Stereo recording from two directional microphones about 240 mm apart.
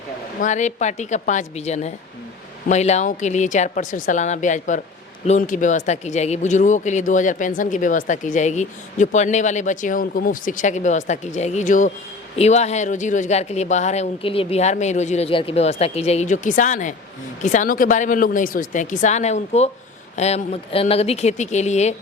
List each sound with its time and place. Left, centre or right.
0.4 s speech: left